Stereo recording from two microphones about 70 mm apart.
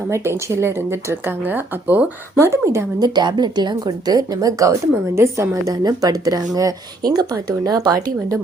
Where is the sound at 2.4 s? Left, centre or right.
Right.